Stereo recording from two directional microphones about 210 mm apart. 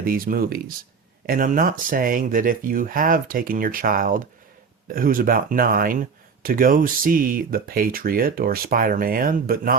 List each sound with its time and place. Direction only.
0.0 s speech: 45° right (ahead or behind)